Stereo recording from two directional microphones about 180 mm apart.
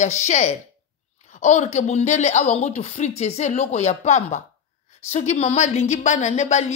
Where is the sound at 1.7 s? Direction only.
40° left (ahead or behind).